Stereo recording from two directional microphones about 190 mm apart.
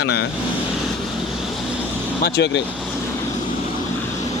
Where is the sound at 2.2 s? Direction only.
60° left (ahead or behind).